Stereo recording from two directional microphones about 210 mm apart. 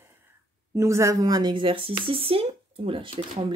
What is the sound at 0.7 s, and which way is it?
Speech, 15° right (ahead or behind).